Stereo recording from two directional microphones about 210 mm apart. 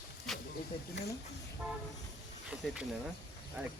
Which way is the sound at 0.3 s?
Centre (ahead or behind).